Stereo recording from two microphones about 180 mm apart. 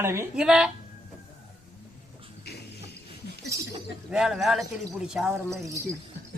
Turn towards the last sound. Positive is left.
turn(degrees=-15)  # may be behind; listen again after turning